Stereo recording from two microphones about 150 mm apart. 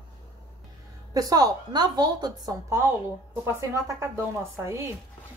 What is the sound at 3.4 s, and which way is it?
Speech, 15° right (ahead or behind).